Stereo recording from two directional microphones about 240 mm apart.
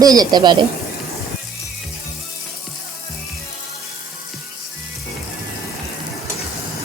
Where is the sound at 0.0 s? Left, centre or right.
Centre.